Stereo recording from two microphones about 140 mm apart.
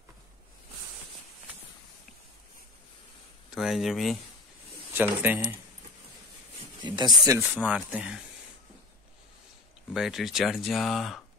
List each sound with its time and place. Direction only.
3.4 s speech: centre (ahead or behind)
4.9 s speech: 15° right (ahead or behind)
6.8 s speech: 30° right (ahead or behind)
7.4 s speech: 10° right (ahead or behind)
9.9 s speech: centre (ahead or behind)